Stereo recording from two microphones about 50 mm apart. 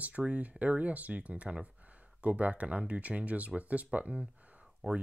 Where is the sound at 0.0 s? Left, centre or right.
Right.